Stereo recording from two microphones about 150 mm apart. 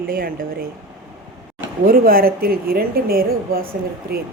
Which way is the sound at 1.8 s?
75° right (ahead or behind).